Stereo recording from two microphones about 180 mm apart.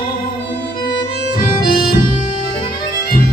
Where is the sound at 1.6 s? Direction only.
55° left (ahead or behind).